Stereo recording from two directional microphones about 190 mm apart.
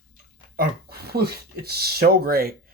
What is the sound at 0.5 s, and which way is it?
Speech, 55° right (ahead or behind).